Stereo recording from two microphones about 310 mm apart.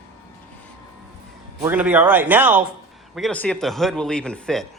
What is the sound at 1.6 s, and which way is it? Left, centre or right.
Speech, centre.